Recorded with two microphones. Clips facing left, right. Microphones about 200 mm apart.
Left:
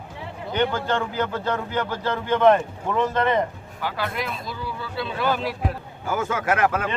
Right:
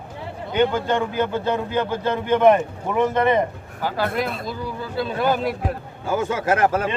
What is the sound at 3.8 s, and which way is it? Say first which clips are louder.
Speech: right 5 dB; 40° right (ahead or behind).